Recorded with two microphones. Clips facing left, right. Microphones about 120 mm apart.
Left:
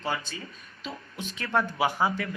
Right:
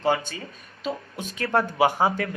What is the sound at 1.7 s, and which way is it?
Speech, 25° right (ahead or behind).